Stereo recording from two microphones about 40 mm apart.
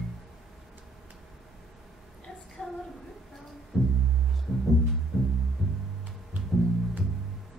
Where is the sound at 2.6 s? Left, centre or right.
Centre.